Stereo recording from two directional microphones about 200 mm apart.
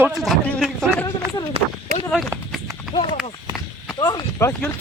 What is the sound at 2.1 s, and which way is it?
Speech, centre (ahead or behind).